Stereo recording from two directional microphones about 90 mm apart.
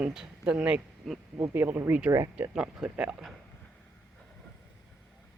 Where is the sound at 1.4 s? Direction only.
25° right (ahead or behind).